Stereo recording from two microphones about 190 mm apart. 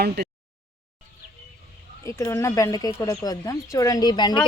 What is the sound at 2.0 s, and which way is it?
Speech, 15° left (ahead or behind).